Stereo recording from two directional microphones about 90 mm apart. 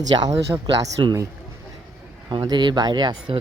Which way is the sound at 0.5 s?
30° right (ahead or behind).